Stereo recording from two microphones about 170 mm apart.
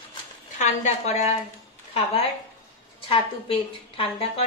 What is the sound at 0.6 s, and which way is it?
Speech, 45° left (ahead or behind).